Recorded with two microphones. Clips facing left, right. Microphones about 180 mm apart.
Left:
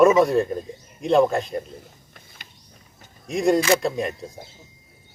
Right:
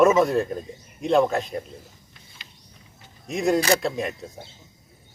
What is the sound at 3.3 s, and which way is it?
Speech, centre (ahead or behind).